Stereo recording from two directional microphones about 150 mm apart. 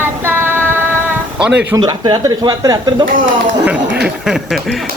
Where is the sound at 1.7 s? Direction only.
30° right (ahead or behind).